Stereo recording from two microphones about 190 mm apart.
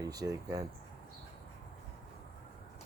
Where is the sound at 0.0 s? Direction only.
20° right (ahead or behind).